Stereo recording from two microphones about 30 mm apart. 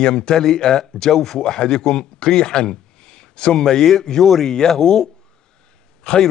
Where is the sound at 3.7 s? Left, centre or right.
Centre.